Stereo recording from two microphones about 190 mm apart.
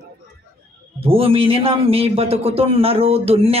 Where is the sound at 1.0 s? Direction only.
30° right (ahead or behind).